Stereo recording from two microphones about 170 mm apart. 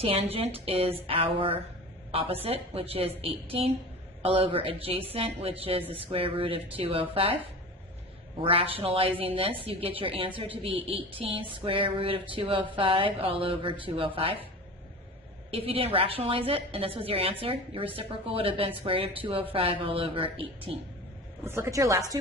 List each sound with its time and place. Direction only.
0.0 s a woman's voice: 35° right (ahead or behind)
8.4 s a woman's voice: 35° right (ahead or behind)
15.4 s a woman's voice: 35° right (ahead or behind)
21.4 s a woman's voice: 15° right (ahead or behind)